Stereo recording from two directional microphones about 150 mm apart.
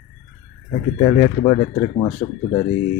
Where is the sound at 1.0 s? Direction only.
35° left (ahead or behind).